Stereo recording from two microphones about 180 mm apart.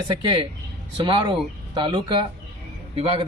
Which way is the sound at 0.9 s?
25° right (ahead or behind).